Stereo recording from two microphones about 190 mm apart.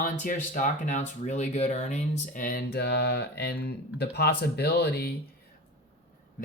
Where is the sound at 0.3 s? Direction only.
45° left (ahead or behind).